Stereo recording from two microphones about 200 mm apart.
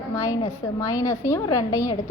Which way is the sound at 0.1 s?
15° left (ahead or behind).